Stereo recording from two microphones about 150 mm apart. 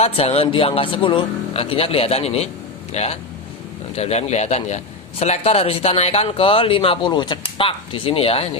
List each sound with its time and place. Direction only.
0.0 s a man's voice: 40° left (ahead or behind)